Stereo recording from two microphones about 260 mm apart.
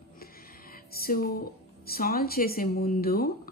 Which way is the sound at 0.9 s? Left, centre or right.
Left.